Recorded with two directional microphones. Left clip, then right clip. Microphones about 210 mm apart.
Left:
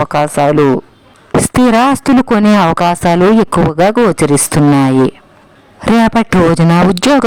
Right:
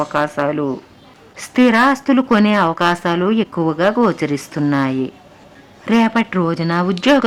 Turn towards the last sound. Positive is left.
turn(degrees=50)  # may be behind; listen again after turning